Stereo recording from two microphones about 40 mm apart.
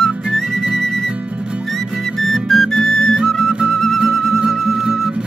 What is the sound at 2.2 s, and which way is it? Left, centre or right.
Music, centre.